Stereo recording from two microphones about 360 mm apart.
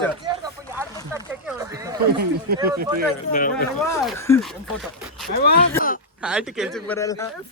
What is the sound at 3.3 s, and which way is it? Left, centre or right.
Speech, left.